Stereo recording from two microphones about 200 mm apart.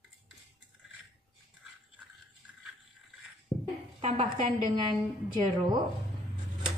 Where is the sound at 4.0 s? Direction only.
35° right (ahead or behind).